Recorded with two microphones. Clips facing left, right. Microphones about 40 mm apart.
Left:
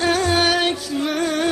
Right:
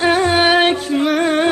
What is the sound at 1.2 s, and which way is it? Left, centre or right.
Music, right.